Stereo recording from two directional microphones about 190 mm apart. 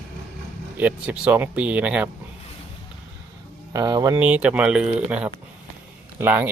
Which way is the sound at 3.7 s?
20° right (ahead or behind).